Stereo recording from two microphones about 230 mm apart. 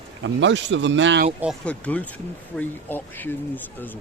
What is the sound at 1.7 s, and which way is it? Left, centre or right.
Speech, centre.